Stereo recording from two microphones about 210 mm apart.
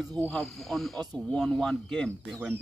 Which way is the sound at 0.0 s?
5° left (ahead or behind).